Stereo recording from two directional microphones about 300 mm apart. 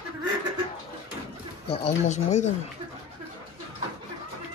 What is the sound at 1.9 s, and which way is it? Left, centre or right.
Speech, left.